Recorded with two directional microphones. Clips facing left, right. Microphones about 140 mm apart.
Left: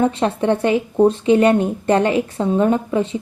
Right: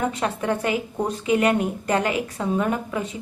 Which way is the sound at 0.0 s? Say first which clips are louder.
Left 7 dB; 30° left (ahead or behind).